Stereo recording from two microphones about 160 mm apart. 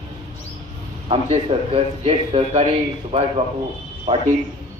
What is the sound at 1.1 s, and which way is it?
A man's voice, 40° right (ahead or behind).